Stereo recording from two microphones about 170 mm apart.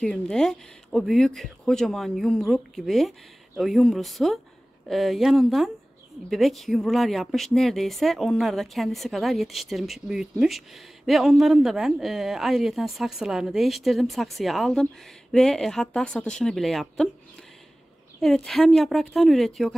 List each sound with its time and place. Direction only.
0.0 s speech: 5° left (ahead or behind)
18.2 s speech: centre (ahead or behind)